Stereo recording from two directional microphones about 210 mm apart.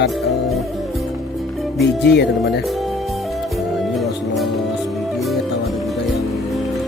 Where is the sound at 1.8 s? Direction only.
55° left (ahead or behind).